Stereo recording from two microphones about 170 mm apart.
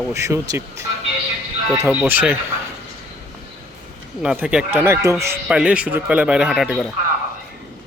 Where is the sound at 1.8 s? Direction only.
10° right (ahead or behind).